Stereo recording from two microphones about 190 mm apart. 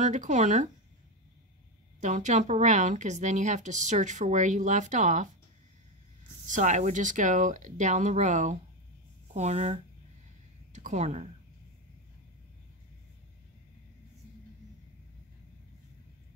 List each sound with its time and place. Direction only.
0.0 s speech: 40° right (ahead or behind)
2.0 s speech: 40° right (ahead or behind)
6.4 s speech: 40° right (ahead or behind)